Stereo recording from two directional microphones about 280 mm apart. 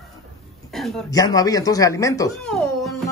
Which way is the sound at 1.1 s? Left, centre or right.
Centre.